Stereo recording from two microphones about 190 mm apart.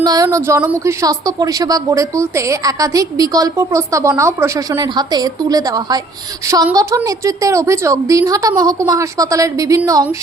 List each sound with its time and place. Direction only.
0.0 s speech: 20° right (ahead or behind)